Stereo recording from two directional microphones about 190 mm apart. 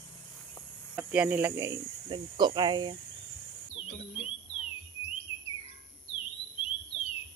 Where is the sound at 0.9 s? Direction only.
5° right (ahead or behind); by 3.0 s 25° right (ahead or behind).